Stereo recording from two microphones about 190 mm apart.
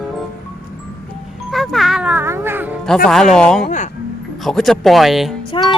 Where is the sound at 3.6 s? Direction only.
40° left (ahead or behind).